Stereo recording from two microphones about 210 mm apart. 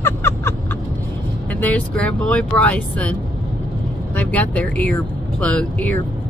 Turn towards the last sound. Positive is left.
turn(degrees=5)  # may be behind; listen again after turning